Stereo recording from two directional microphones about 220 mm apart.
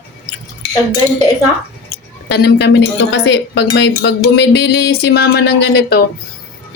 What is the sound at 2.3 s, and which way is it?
A woman's voice, 50° left (ahead or behind).